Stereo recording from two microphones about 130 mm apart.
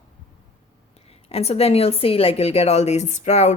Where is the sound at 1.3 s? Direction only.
50° left (ahead or behind).